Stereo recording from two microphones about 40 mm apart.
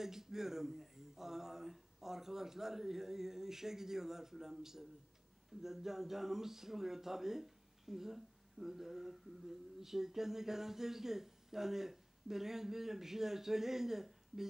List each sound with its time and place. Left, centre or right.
0.0 s speech: centre